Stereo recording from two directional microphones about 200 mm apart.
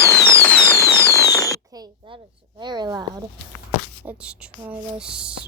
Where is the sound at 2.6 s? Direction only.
20° right (ahead or behind).